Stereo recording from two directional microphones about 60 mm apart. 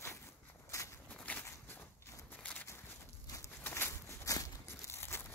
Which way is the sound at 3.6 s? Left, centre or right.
Left.